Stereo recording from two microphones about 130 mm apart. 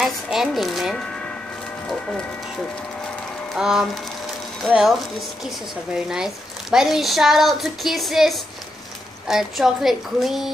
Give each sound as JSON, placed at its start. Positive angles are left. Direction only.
{"t": 0.0, "sound": "speech", "side_deg": -5}
{"t": 5.9, "sound": "speech", "side_deg": -5}